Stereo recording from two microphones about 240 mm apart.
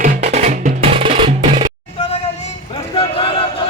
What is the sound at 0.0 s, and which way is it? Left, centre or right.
Music, right.